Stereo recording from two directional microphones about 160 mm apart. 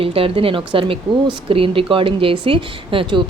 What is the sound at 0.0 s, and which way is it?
Speech, 35° right (ahead or behind).